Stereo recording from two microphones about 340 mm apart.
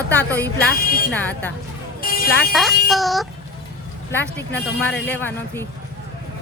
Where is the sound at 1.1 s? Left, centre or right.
Centre.